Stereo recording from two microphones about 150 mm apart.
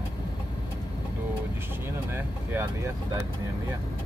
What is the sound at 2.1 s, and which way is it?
Speech, 15° right (ahead or behind).